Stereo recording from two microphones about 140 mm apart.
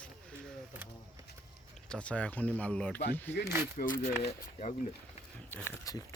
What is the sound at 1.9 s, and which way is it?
Speech, 10° left (ahead or behind).